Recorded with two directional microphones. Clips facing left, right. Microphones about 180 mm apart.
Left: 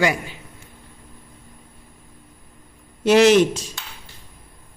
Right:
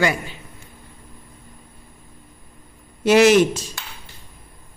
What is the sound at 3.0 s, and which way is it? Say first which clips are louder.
Speech: even; 5° right (ahead or behind).